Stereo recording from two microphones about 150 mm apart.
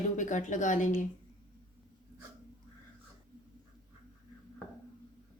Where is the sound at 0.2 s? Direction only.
55° left (ahead or behind).